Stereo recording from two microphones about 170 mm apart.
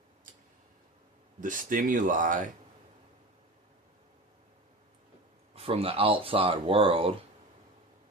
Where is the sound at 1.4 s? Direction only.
50° right (ahead or behind).